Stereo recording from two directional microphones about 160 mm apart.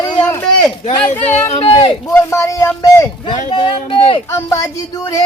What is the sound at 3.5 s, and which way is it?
Speech, 30° left (ahead or behind).